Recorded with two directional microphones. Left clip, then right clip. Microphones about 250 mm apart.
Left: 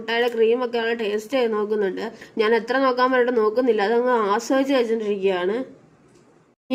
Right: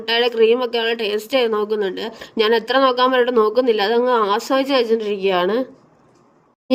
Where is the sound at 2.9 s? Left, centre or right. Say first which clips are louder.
Right 4 dB; centre.